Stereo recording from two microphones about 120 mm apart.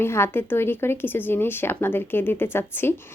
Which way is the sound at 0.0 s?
20° left (ahead or behind).